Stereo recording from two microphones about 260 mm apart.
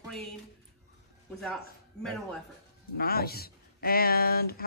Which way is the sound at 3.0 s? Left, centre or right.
Left.